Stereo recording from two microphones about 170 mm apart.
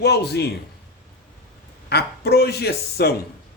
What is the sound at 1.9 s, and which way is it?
Speech, 70° left (ahead or behind).